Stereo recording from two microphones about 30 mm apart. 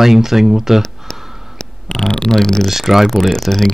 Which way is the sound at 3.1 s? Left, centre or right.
Centre.